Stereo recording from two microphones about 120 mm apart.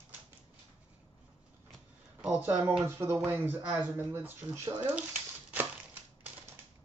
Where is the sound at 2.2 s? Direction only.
10° right (ahead or behind).